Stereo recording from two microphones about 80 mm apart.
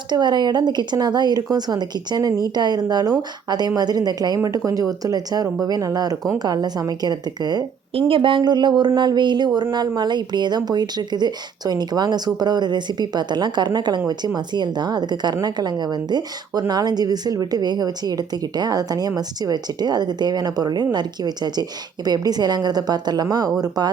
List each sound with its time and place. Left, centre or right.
0.1 s a woman's voice: right
8.0 s speech: right
9.7 s a woman's voice: right